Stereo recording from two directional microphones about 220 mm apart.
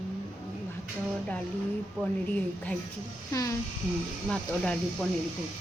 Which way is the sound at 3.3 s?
15° left (ahead or behind).